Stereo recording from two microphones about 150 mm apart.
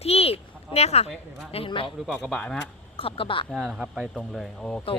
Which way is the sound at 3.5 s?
Centre (ahead or behind).